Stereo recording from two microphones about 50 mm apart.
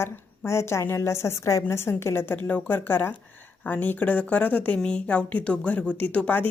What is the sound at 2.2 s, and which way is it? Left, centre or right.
Speech, left.